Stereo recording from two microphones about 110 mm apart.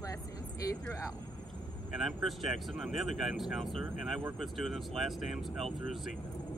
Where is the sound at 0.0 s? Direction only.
30° left (ahead or behind).